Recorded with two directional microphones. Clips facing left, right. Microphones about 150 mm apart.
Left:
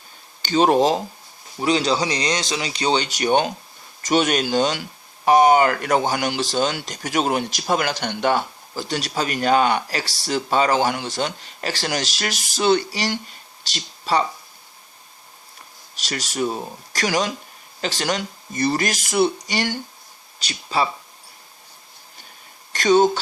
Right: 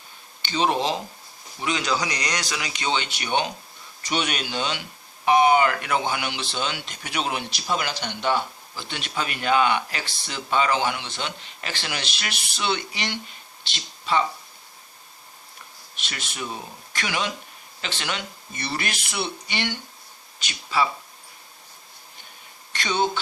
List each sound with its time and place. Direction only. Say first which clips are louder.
0.4 s speech: left 7 dB; 45° left (ahead or behind)
1.6 s speech: left 6 dB; 30° left (ahead or behind)
16.0 s speech: left 10 dB; 40° left (ahead or behind)
22.7 s speech: left 9 dB; 40° left (ahead or behind)